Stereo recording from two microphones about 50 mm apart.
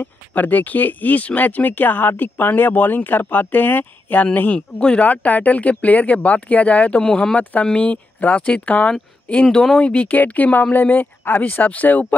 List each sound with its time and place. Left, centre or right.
0.0 s speech: left
7.0 s speech: centre
7.6 s speech: left